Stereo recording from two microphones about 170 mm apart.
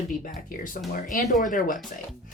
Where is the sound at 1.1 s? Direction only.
55° left (ahead or behind).